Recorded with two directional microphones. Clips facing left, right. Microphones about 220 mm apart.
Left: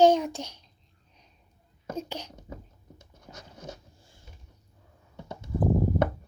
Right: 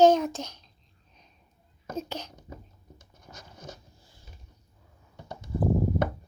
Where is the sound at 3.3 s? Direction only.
20° left (ahead or behind).